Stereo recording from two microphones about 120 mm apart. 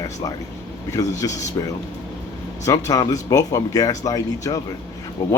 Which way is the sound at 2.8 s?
30° left (ahead or behind).